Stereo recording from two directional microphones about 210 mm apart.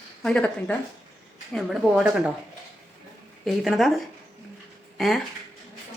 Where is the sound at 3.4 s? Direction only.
Centre (ahead or behind).